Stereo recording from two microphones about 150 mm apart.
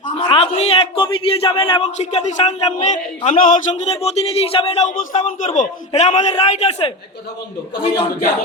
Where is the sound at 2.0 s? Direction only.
45° left (ahead or behind).